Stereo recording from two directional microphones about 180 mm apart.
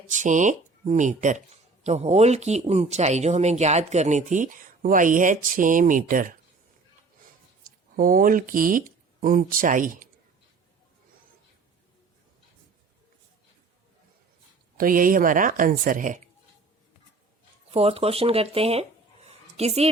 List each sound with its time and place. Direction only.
0.1 s speech: 45° right (ahead or behind)
7.9 s speech: 50° right (ahead or behind)
14.8 s speech: 50° right (ahead or behind)
17.7 s speech: 35° right (ahead or behind)